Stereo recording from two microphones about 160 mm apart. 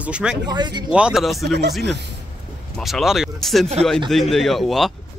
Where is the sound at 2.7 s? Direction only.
Centre (ahead or behind).